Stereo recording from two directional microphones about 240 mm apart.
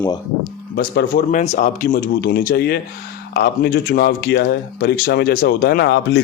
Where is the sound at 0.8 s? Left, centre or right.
Left.